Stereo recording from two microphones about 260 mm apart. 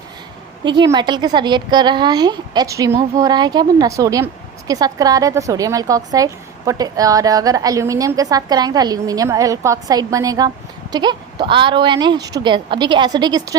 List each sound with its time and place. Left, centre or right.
0.6 s a woman's voice: centre